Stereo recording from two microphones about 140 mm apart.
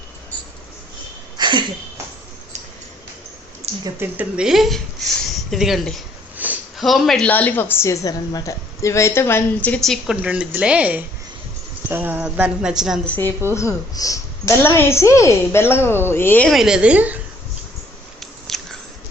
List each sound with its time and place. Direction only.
1.4 s a sound: 35° right (ahead or behind)
3.8 s a woman's voice: 15° right (ahead or behind)
6.3 s sniff: 10° right (ahead or behind)
6.7 s a woman's voice: centre (ahead or behind)
10.2 s a woman's voice: 10° right (ahead or behind)
13.1 s a woman's voice: 15° left (ahead or behind)
16.5 s a woman's voice: 5° right (ahead or behind)
18.2 s biting: centre (ahead or behind)